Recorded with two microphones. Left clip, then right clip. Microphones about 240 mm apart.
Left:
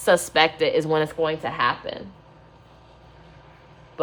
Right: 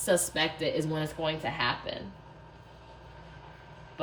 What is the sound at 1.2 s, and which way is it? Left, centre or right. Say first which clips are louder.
Speech: left 8 dB; centre.